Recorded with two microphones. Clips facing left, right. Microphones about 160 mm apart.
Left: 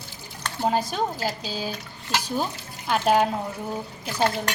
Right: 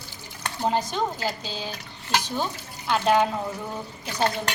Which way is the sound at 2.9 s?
10° left (ahead or behind).